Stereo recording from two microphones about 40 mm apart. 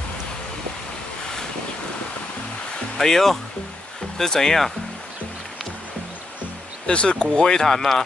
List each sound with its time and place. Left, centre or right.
3.0 s speech: centre
6.9 s speech: left
7.6 s speech: centre